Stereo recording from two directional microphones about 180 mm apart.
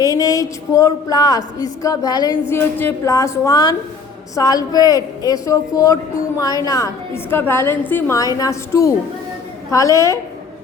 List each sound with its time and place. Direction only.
0.0 s a woman's voice: 20° left (ahead or behind)